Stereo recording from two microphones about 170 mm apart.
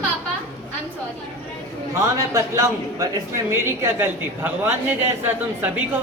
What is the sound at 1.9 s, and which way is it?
A man's voice, 20° right (ahead or behind).